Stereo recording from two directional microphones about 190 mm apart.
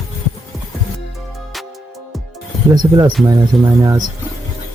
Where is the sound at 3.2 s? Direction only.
20° right (ahead or behind).